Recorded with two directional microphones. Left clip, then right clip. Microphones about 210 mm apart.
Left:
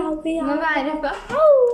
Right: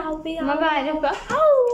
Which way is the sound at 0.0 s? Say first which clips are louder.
Left 4 dB; 15° left (ahead or behind).